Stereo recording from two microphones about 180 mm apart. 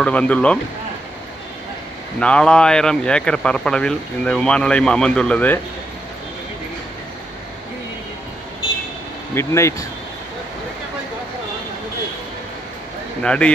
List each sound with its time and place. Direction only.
0.0 s speech: 5° left (ahead or behind)
2.1 s speech: 5° left (ahead or behind)
9.3 s speech: 15° left (ahead or behind)
13.2 s speech: 5° left (ahead or behind)